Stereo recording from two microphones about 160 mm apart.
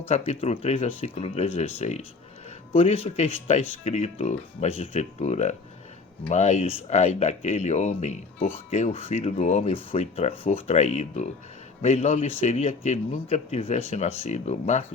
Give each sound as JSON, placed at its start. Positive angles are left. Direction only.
{"t": 0.1, "sound": "speech", "side_deg": 45}